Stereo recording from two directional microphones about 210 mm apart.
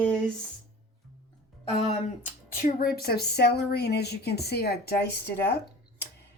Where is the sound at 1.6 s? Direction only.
25° left (ahead or behind); by 5.2 s 50° left (ahead or behind).